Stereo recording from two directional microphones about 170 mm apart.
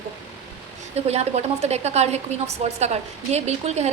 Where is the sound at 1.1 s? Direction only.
40° right (ahead or behind).